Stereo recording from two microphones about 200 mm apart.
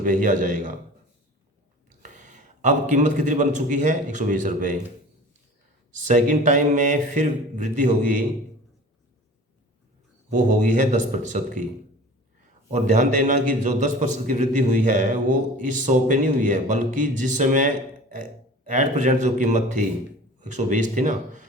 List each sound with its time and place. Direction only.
0.0 s a man's voice: 40° right (ahead or behind)
2.0 s a man's voice: 40° right (ahead or behind)
6.1 s a man's voice: 40° right (ahead or behind)
10.2 s a man's voice: 40° right (ahead or behind)
12.7 s a man's voice: 40° right (ahead or behind)
18.7 s a man's voice: 40° right (ahead or behind)